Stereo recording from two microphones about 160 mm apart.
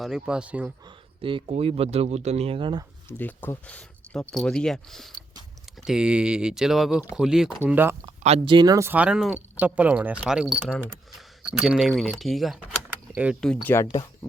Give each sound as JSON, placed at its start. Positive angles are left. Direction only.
{"t": 0.0, "sound": "speech", "side_deg": -5}
{"t": 0.9, "sound": "speech", "side_deg": -30}
{"t": 3.1, "sound": "speech", "side_deg": 10}
{"t": 8.4, "sound": "speech", "side_deg": -25}
{"t": 10.7, "sound": "speech", "side_deg": 5}
{"t": 11.5, "sound": "speech", "side_deg": -5}
{"t": 13.2, "sound": "speech", "side_deg": -10}